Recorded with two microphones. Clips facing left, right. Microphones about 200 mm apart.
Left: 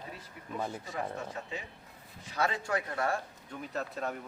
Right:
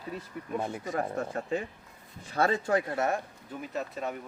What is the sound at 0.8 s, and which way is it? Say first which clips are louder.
Speech: right 6 dB; 45° right (ahead or behind).